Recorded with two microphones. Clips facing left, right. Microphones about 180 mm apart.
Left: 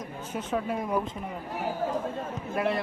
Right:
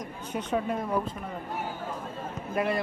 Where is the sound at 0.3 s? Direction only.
5° left (ahead or behind).